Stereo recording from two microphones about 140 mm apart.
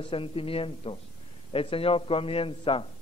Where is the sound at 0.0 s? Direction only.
40° left (ahead or behind).